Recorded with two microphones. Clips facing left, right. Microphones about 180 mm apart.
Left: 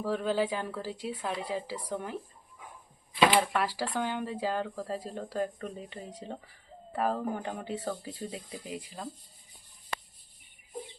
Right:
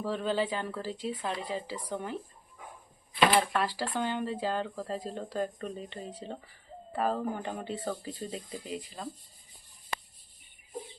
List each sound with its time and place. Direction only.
0.0 s speech: 10° left (ahead or behind)
3.2 s speech: 10° left (ahead or behind)